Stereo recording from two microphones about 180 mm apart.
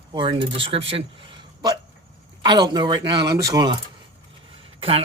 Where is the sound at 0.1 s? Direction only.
30° right (ahead or behind).